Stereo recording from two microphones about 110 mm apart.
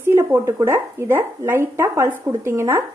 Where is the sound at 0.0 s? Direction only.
20° right (ahead or behind).